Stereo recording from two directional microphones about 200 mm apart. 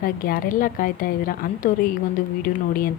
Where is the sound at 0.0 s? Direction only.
45° left (ahead or behind).